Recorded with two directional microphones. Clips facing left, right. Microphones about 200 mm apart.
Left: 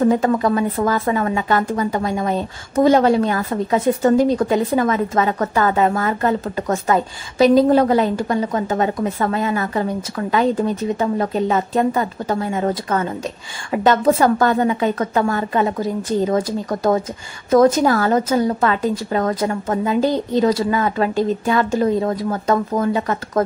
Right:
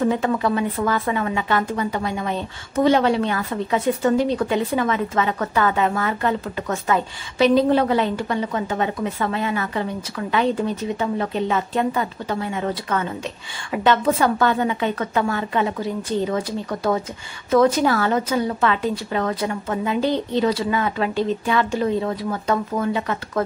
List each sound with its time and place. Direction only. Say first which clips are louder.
0.0 s a woman's voice: left 4 dB; 40° left (ahead or behind)